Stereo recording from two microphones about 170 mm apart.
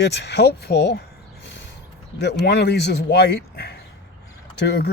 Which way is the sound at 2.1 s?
75° left (ahead or behind).